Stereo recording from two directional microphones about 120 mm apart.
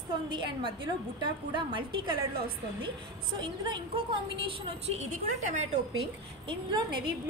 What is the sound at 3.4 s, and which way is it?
A woman's voice, 40° right (ahead or behind).